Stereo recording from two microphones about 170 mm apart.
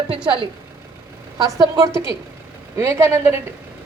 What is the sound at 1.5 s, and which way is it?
A woman's voice, 20° right (ahead or behind).